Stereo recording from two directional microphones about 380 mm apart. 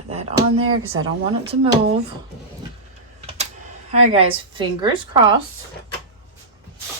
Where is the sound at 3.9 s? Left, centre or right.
Centre.